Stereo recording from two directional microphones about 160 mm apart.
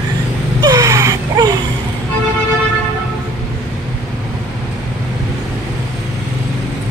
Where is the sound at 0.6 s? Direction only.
20° right (ahead or behind).